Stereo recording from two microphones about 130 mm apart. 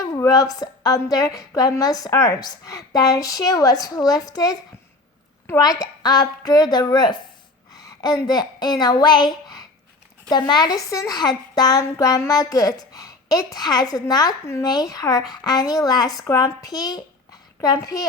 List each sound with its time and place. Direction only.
0.0 s a woman's voice: 25° left (ahead or behind)